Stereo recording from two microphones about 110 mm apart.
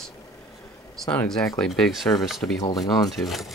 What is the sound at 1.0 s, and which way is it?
Speech, 5° left (ahead or behind).